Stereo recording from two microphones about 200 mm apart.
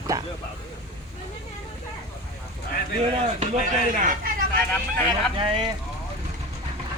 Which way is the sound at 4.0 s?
40° right (ahead or behind).